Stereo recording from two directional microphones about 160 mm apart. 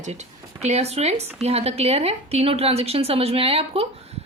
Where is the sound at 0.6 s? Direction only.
40° right (ahead or behind).